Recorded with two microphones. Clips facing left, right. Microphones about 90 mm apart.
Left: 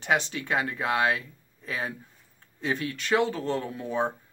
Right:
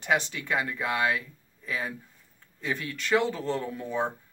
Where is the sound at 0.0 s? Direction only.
20° left (ahead or behind).